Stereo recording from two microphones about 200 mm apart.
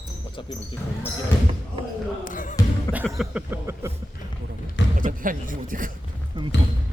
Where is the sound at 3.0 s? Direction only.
5° right (ahead or behind).